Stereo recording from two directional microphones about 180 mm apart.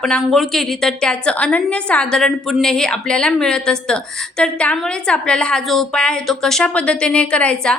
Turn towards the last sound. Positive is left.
turn(degrees=5)  # may be behind; listen again after turning